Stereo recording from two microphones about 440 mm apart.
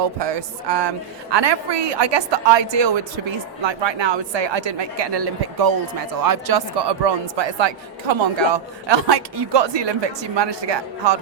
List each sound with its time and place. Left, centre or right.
0.2 s a woman's voice: right
8.9 s a woman's voice: right